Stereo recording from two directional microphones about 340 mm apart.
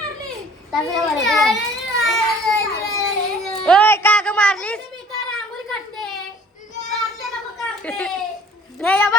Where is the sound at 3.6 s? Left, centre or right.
Centre.